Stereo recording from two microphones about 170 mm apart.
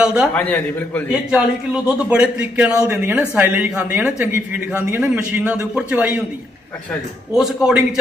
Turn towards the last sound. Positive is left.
turn(degrees=-5)  # may be behind; listen again after turning